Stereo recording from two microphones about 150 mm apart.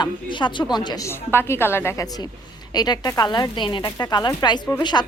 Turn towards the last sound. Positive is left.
turn(degrees=30)  # may be behind; listen again after turning